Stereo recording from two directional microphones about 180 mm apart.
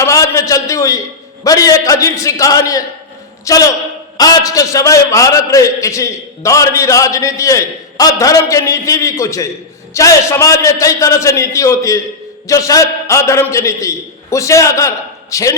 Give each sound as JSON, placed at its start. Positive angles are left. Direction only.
{"t": 0.0, "sound": "a man's voice", "side_deg": 15}